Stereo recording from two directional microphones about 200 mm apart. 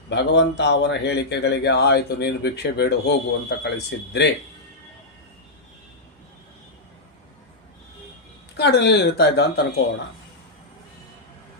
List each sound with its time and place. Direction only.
0.1 s speech: 60° left (ahead or behind)
8.5 s speech: 55° left (ahead or behind)